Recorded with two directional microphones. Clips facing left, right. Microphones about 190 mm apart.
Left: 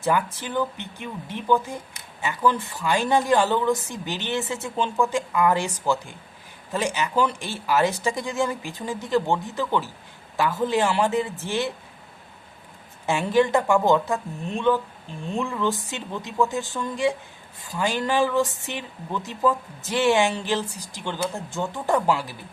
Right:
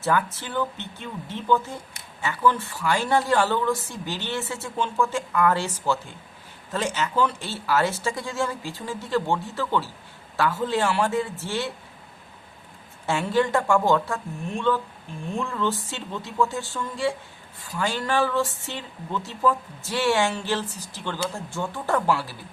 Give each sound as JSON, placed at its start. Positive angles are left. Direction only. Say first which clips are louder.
{"t": 0.0, "sound": "speech", "louder": "left 1 dB", "side_deg": 15}
{"t": 13.1, "sound": "speech", "louder": "left 2 dB", "side_deg": 15}